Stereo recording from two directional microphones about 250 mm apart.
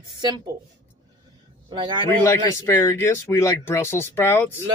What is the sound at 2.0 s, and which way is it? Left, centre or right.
Speech, centre.